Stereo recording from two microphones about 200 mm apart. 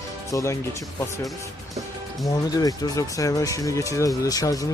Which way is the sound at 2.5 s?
20° left (ahead or behind).